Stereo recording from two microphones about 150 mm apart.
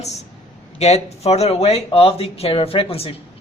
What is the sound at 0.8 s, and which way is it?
Speech, 45° left (ahead or behind).